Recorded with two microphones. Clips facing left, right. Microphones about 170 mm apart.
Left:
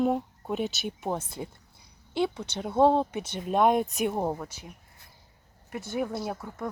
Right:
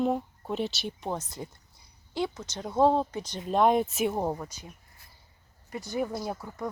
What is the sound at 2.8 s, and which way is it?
Speech, 20° left (ahead or behind).